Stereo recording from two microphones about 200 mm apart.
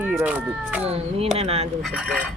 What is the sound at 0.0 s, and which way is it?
Speech, 5° right (ahead or behind).